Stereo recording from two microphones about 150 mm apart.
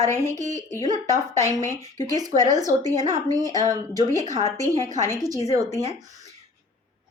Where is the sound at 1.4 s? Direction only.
20° left (ahead or behind).